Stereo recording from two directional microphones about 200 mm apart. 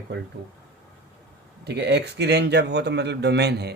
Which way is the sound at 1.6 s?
55° right (ahead or behind).